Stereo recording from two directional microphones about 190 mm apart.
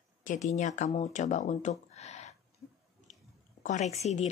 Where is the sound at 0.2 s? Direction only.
40° left (ahead or behind).